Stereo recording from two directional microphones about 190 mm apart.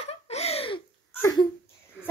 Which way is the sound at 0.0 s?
35° left (ahead or behind).